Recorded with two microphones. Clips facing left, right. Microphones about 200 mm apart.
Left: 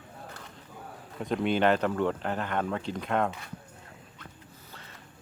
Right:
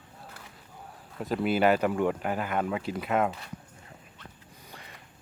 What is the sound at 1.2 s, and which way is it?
Speech, 5° right (ahead or behind).